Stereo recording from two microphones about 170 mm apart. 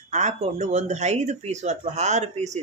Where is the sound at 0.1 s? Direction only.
45° right (ahead or behind).